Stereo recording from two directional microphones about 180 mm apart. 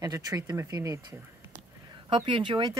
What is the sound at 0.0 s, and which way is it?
Speech, 20° right (ahead or behind).